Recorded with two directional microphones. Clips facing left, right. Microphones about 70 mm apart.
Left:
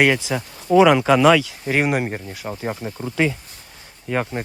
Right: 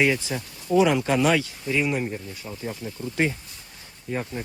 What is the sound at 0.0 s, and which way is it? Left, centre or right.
Speech, left.